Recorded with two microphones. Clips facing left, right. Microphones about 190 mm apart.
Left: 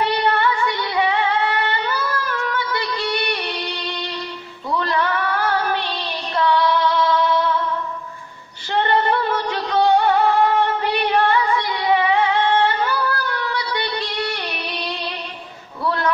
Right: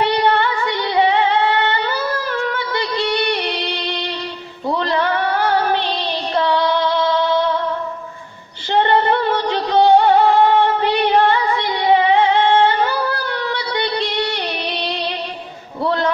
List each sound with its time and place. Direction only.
0.0 s female singing: 30° right (ahead or behind)
4.6 s music: 30° right (ahead or behind)
8.7 s music: 30° right (ahead or behind)
15.8 s a sound: 30° right (ahead or behind)